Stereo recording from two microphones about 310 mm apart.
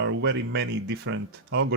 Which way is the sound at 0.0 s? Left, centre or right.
Right.